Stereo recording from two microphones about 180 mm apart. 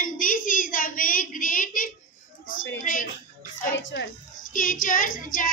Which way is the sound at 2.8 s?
50° left (ahead or behind).